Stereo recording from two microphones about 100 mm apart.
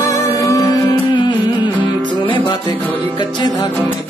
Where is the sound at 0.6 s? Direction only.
50° left (ahead or behind).